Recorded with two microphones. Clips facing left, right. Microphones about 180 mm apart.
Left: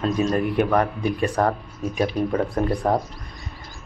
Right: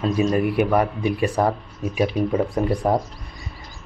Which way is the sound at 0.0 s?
10° right (ahead or behind).